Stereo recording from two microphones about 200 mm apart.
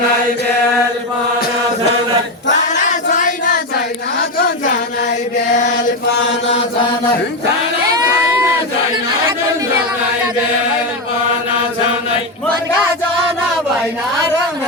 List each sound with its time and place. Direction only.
2.5 s choir: 35° left (ahead or behind)
5.5 s chant: 40° left (ahead or behind)